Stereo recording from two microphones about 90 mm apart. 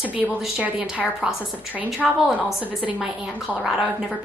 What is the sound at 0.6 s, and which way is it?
Speech, 15° right (ahead or behind).